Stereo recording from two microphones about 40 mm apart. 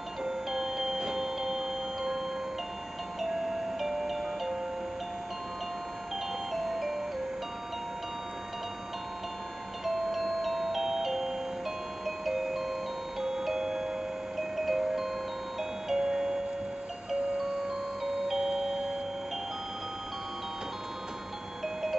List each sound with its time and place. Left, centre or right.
0.2 s clock: centre
3.2 s music: centre
6.5 s music: centre
9.8 s music: centre
17.6 s music: centre